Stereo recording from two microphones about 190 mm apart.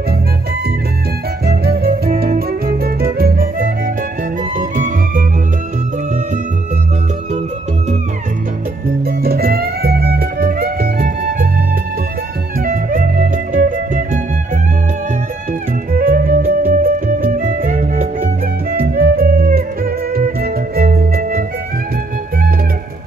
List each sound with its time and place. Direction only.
1.4 s music: 55° right (ahead or behind)
8.8 s music: 55° right (ahead or behind)
12.5 s music: 45° right (ahead or behind)
15.9 s music: 50° right (ahead or behind)